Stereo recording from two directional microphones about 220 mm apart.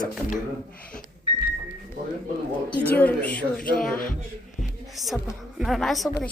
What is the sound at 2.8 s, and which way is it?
Speech, 10° left (ahead or behind).